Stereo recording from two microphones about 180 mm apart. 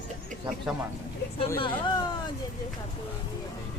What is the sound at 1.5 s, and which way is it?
Speech, 25° left (ahead or behind).